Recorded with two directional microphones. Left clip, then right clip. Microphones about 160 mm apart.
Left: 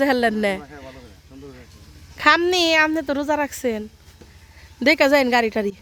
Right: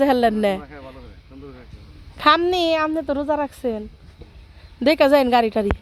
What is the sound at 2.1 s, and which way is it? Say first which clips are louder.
Speech: even; 10° left (ahead or behind).